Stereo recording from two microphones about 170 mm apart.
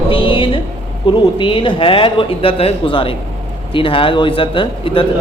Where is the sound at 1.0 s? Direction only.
30° left (ahead or behind).